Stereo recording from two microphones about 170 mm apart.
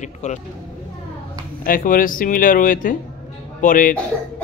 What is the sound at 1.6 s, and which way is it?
Speech, 55° left (ahead or behind).